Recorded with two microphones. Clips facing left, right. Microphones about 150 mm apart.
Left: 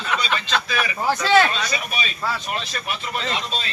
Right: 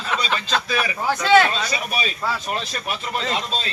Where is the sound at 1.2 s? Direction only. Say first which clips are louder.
Right 2 dB; 10° right (ahead or behind).